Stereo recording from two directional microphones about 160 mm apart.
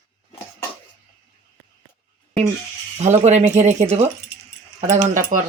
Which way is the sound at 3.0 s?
45° right (ahead or behind).